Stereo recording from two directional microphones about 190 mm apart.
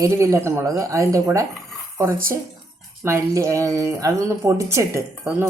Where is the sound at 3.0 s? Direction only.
15° right (ahead or behind).